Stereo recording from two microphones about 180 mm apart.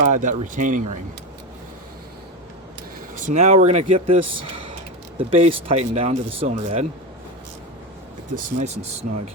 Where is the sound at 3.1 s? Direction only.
45° right (ahead or behind).